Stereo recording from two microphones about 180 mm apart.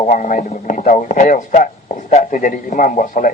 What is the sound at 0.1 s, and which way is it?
Speech, 45° left (ahead or behind).